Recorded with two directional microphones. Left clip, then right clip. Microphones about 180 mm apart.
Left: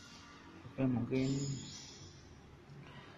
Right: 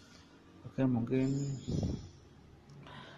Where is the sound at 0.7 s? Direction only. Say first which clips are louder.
Right 3 dB; 35° right (ahead or behind).